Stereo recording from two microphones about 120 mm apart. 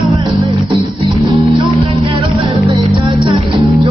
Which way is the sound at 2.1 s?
45° right (ahead or behind).